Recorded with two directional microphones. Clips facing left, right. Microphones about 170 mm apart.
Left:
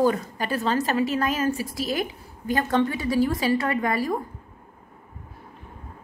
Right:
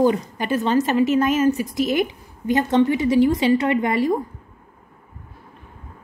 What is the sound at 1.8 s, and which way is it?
A woman's voice, 20° right (ahead or behind).